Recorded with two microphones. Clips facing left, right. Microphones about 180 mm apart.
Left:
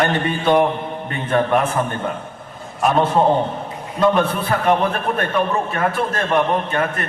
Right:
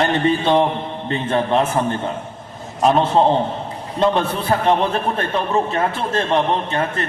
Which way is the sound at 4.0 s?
25° right (ahead or behind).